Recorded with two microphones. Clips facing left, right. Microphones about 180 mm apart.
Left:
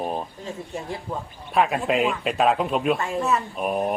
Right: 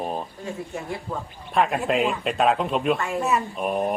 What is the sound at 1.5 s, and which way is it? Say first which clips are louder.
A man's voice: even; centre (ahead or behind).